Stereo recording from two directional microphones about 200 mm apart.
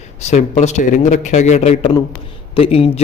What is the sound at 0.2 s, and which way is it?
A man's voice, 35° left (ahead or behind).